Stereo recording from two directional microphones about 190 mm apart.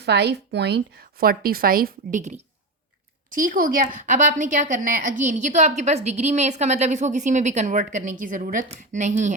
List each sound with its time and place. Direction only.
0.0 s a woman's voice: 60° right (ahead or behind); by 9.3 s 40° right (ahead or behind)